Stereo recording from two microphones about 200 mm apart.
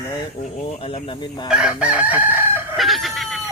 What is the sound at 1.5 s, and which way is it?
Chicken, 5° right (ahead or behind).